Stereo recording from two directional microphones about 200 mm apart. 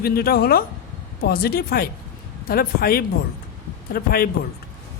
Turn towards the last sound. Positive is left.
turn(degrees=50)  # may be behind; listen again after turning